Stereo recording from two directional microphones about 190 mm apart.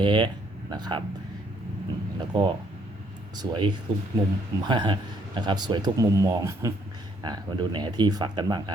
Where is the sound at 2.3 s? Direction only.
30° right (ahead or behind).